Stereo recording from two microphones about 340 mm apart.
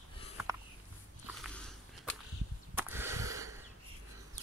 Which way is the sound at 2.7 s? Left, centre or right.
Centre.